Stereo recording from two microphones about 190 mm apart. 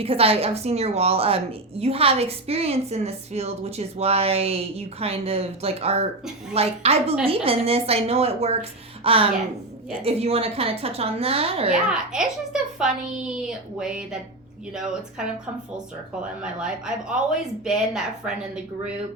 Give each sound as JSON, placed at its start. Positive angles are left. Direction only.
{"t": 0.0, "sound": "a woman's voice", "side_deg": -30}
{"t": 11.9, "sound": "speech", "side_deg": -5}
{"t": 16.4, "sound": "speech", "side_deg": -5}